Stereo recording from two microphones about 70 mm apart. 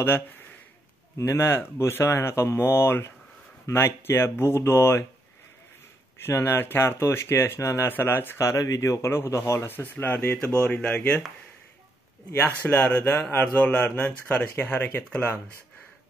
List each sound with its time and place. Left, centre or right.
1.1 s speech: left
6.1 s speech: left
8.4 s speech: left
9.0 s speech: left
9.7 s speech: left
12.6 s speech: left